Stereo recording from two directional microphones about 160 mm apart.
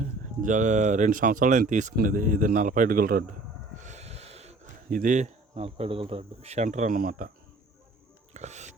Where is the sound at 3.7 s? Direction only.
45° right (ahead or behind).